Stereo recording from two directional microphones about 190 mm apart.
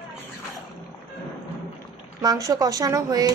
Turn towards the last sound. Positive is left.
turn(degrees=-20)  # may be behind; listen again after turning